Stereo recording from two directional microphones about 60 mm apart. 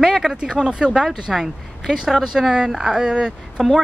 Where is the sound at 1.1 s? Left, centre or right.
Centre.